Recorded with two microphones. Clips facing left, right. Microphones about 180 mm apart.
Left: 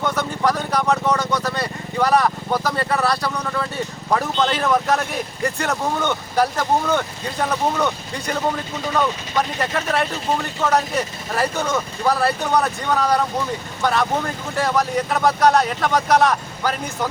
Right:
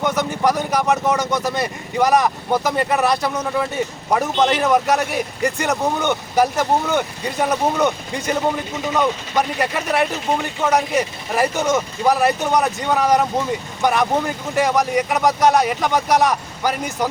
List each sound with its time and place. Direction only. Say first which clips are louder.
0.0 s speech: right 2 dB; 15° right (ahead or behind)